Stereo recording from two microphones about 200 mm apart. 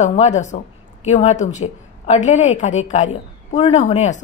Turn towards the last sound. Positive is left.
turn(degrees=35)  # may be behind; listen again after turning